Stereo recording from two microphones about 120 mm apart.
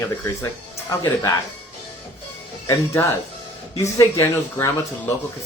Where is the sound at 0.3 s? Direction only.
20° left (ahead or behind).